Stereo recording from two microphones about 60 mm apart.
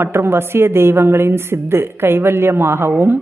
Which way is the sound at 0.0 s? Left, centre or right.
Right.